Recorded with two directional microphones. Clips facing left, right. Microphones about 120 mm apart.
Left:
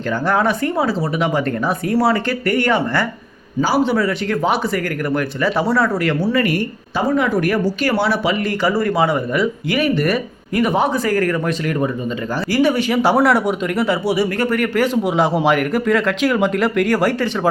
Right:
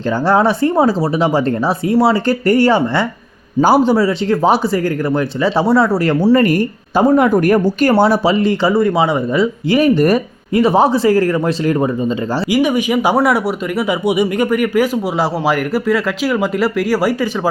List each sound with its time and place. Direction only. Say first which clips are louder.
0.3 s speech: right 5 dB; 30° right (ahead or behind)
2.2 s speech: right 6 dB; 35° right (ahead or behind)
3.6 s a man's voice: right 6 dB; 50° right (ahead or behind)
3.9 s speech: right 4 dB; 30° right (ahead or behind)
6.1 s speech: right 6 dB; 40° right (ahead or behind)
12.5 s a man's voice: right 1 dB; 15° right (ahead or behind)